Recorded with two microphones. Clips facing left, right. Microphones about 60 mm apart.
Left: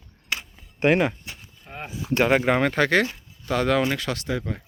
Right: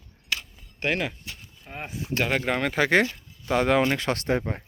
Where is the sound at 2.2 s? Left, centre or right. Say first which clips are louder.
Left 6 dB; centre.